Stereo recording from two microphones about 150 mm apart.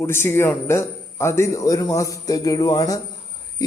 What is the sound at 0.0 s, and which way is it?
A man's voice, 15° left (ahead or behind).